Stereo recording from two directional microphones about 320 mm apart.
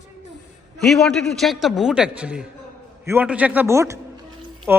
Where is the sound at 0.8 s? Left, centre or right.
Centre.